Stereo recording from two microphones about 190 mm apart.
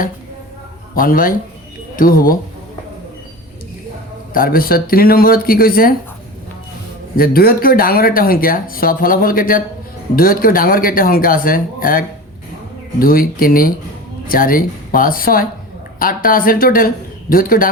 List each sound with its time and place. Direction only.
0.9 s speech: 50° left (ahead or behind)
4.4 s speech: 50° left (ahead or behind)
7.2 s speech: 50° left (ahead or behind)